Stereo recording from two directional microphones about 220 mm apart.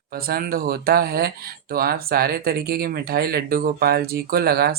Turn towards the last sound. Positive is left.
turn(degrees=-45)  # may be behind; listen again after turning